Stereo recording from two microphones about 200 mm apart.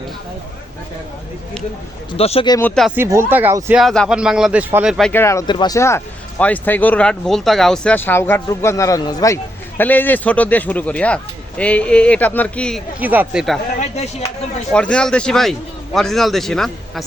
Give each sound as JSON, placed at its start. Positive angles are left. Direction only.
{"t": 2.1, "sound": "speech", "side_deg": 30}
{"t": 2.6, "sound": "a man's voice", "side_deg": 5}
{"t": 2.9, "sound": "speech", "side_deg": -10}
{"t": 3.8, "sound": "a man's voice", "side_deg": 0}
{"t": 13.0, "sound": "a man's voice", "side_deg": -10}
{"t": 13.7, "sound": "speech", "side_deg": 35}
{"t": 14.7, "sound": "a man's voice", "side_deg": 5}